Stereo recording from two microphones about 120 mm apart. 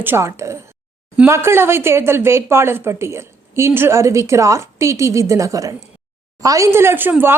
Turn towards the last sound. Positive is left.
turn(degrees=-15)  # may be behind; listen again after turning